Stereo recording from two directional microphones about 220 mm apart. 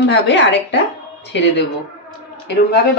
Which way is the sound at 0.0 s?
55° left (ahead or behind).